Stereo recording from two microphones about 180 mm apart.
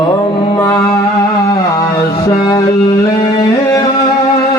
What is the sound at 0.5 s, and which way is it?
Music, 15° left (ahead or behind).